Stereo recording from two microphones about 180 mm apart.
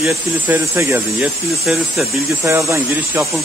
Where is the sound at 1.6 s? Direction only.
Centre (ahead or behind).